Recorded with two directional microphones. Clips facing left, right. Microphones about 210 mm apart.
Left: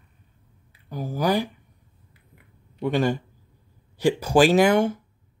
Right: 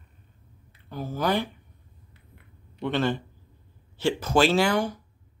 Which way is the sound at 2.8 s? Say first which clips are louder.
Left 3 dB; 15° left (ahead or behind).